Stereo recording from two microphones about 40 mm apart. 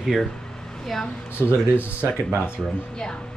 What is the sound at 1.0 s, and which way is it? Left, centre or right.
Speech, left.